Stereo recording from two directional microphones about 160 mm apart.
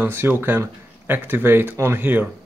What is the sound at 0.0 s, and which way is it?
Speech, 15° right (ahead or behind).